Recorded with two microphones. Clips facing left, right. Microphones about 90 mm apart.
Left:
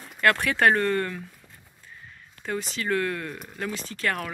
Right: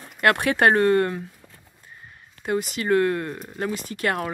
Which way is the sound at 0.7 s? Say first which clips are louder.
Right 5 dB; 45° right (ahead or behind).